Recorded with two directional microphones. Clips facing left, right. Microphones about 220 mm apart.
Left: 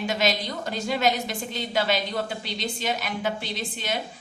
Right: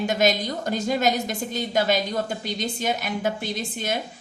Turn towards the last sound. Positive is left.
turn(degrees=-50)  # may be behind; listen again after turning